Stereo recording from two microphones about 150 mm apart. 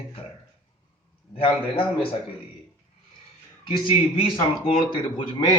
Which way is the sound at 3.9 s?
35° left (ahead or behind).